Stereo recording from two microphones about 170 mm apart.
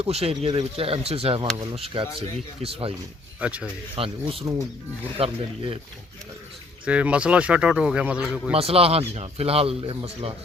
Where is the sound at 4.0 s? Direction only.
35° right (ahead or behind).